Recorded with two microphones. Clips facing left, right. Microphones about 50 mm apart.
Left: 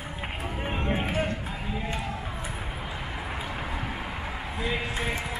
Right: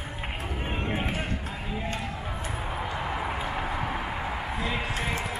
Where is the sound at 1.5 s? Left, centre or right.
Centre.